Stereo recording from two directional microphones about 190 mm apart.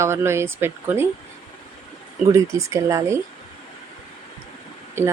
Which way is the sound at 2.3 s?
15° right (ahead or behind).